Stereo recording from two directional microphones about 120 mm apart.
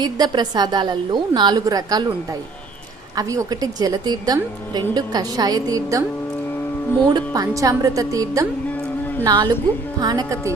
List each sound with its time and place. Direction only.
0.0 s a woman's voice: 35° right (ahead or behind)
3.2 s a woman's voice: 30° right (ahead or behind)
7.1 s a woman's voice: 30° right (ahead or behind)
8.7 s a sound: 15° left (ahead or behind)
9.2 s a woman's voice: 35° right (ahead or behind)